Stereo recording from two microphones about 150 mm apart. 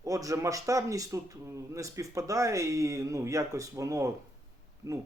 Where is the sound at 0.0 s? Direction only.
20° right (ahead or behind).